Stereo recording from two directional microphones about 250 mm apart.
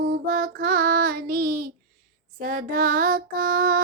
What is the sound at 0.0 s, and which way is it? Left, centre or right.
Child singing, right.